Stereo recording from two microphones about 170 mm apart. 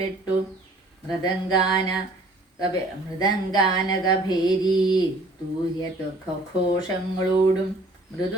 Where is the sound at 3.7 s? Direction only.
25° left (ahead or behind).